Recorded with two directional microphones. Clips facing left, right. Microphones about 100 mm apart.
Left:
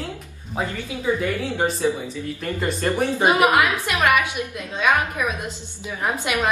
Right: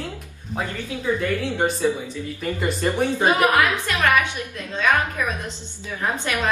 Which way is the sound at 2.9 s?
15° left (ahead or behind).